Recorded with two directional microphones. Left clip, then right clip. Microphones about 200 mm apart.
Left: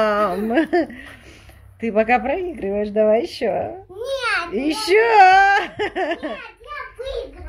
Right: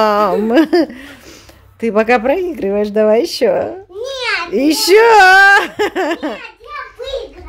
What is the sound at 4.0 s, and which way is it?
Babbling, centre (ahead or behind).